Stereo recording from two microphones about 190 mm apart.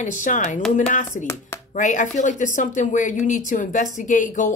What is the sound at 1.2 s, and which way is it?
Speech, 15° left (ahead or behind).